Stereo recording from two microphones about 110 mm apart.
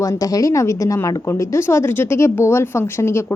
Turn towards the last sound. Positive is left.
turn(degrees=25)  # may be behind; listen again after turning